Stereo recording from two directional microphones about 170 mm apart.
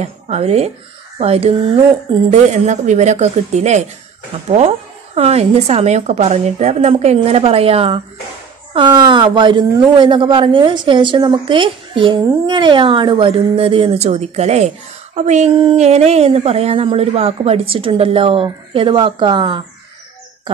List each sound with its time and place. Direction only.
0.0 s a woman's voice: 40° right (ahead or behind)